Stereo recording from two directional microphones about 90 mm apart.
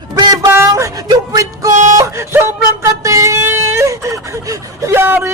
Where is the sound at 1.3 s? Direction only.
40° right (ahead or behind).